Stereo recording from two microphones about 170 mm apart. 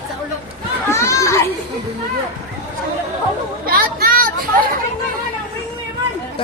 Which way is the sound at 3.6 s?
60° right (ahead or behind).